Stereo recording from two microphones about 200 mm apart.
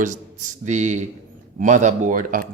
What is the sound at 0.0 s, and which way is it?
Speech, 40° right (ahead or behind).